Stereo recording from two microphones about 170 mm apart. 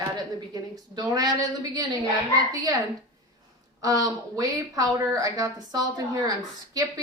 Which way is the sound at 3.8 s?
20° right (ahead or behind).